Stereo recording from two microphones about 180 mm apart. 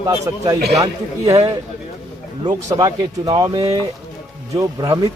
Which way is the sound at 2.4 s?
20° right (ahead or behind).